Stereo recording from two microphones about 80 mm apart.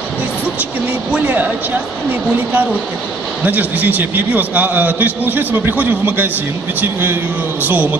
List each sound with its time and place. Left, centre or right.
1.1 s a man's voice: right
3.4 s a man's voice: right